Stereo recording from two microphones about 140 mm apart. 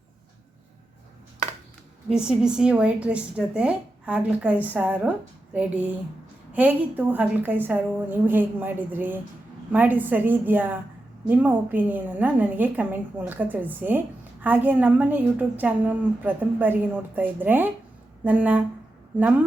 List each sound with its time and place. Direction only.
2.0 s a woman's voice: 5° right (ahead or behind)